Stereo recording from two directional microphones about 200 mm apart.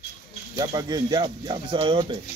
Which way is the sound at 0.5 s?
20° right (ahead or behind).